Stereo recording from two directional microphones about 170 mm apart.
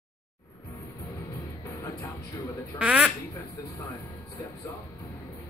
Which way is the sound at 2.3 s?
20° left (ahead or behind).